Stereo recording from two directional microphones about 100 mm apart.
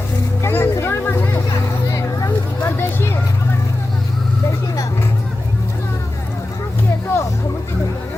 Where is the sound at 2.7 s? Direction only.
25° left (ahead or behind).